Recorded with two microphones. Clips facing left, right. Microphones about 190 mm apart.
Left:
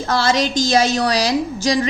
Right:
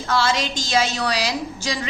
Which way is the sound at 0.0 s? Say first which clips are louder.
Left 4 dB; 40° left (ahead or behind).